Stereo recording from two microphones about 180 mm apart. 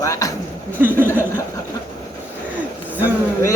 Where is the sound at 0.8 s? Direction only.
10° right (ahead or behind).